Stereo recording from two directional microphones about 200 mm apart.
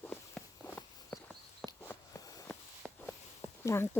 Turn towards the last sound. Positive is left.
turn(degrees=15)  # may be behind; listen again after turning